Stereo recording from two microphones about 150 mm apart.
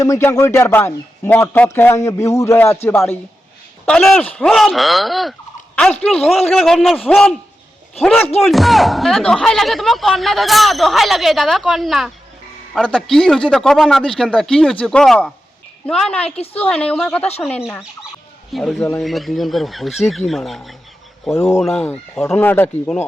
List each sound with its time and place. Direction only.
0.0 s a man's voice: 20° left (ahead or behind)
3.8 s speech: 5° left (ahead or behind)
8.4 s speech: centre (ahead or behind)
18.5 s speech: centre (ahead or behind)
21.2 s speech: 15° left (ahead or behind)